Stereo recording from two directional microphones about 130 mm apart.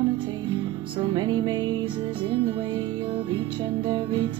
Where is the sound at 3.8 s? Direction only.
35° right (ahead or behind).